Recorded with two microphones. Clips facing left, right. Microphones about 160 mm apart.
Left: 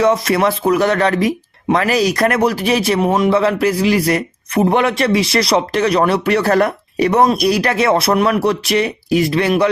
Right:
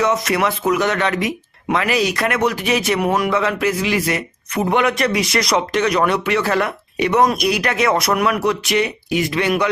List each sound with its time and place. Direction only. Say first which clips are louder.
0.0 s speech: left 4 dB; 30° left (ahead or behind)